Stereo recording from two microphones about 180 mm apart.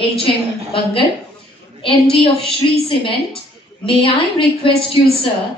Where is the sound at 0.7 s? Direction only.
30° left (ahead or behind).